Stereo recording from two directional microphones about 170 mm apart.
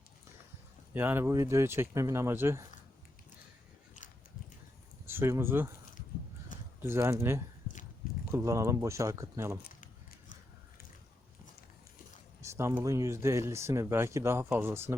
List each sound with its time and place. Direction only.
0.9 s speech: 15° right (ahead or behind)
5.0 s speech: 15° right (ahead or behind)
6.5 s a sound: 50° left (ahead or behind)
6.8 s speech: 15° right (ahead or behind)
9.8 s a sound: 50° left (ahead or behind)
12.4 s speech: 15° right (ahead or behind)